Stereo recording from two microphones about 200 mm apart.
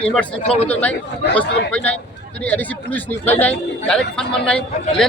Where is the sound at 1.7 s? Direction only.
5° left (ahead or behind).